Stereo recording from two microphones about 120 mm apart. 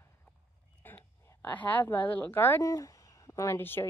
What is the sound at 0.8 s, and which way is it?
A woman's voice, 20° left (ahead or behind).